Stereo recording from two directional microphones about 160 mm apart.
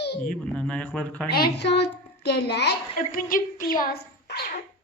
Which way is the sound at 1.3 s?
85° left.